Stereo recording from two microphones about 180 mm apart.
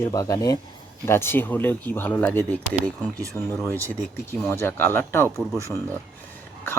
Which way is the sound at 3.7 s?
15° right (ahead or behind).